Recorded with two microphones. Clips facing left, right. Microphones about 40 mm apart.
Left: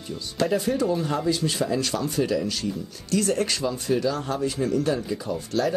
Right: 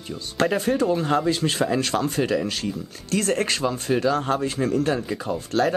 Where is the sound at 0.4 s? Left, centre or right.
Right.